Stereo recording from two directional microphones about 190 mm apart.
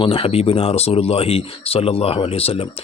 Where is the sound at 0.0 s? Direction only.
30° left (ahead or behind).